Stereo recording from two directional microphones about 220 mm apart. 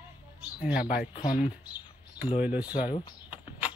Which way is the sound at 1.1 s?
20° left (ahead or behind).